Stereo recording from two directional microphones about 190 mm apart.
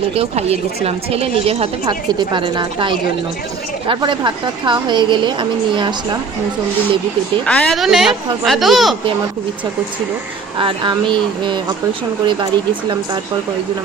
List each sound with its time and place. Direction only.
0.1 s a woman's voice: 30° right (ahead or behind)
7.4 s a woman's voice: 5° left (ahead or behind)
10.6 s a woman's voice: 25° right (ahead or behind)